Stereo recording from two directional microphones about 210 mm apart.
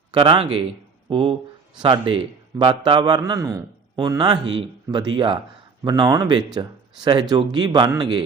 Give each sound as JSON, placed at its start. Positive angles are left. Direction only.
{"t": 0.1, "sound": "a man's voice", "side_deg": -25}